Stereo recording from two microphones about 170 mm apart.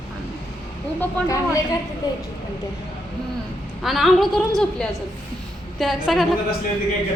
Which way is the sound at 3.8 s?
Centre (ahead or behind).